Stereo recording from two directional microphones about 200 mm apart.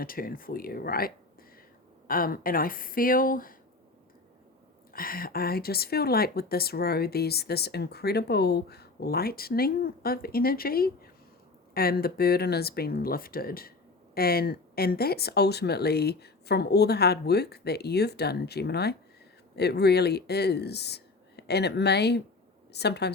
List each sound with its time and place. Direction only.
0.0 s speech: 45° left (ahead or behind)
4.9 s a woman's voice: 45° left (ahead or behind)